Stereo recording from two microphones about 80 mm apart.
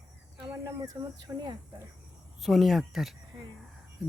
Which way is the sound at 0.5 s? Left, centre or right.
Right.